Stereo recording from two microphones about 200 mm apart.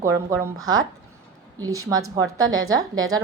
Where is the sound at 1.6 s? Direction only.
20° right (ahead or behind).